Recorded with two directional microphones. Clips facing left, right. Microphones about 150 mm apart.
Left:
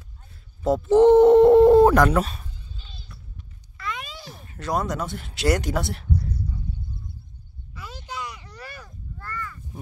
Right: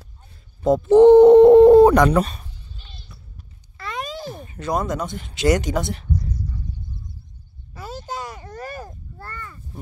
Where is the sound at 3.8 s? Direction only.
40° right (ahead or behind).